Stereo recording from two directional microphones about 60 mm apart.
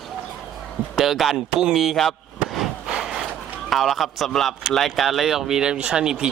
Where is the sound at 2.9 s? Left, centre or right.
Centre.